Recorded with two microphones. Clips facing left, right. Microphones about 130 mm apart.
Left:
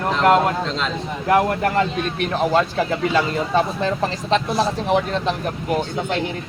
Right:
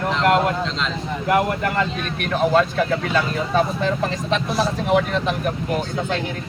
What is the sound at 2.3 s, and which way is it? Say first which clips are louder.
Speech: right 2 dB; 30° left (ahead or behind).